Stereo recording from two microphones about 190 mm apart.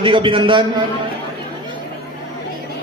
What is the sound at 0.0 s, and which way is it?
Speech, 25° right (ahead or behind).